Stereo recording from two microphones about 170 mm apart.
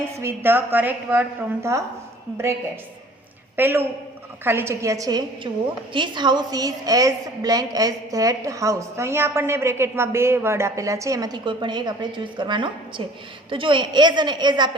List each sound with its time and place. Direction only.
0.2 s a woman's voice: 15° right (ahead or behind)
3.5 s a woman's voice: 10° right (ahead or behind)